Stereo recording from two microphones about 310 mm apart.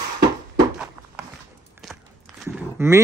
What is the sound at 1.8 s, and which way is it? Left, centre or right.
Walk, centre.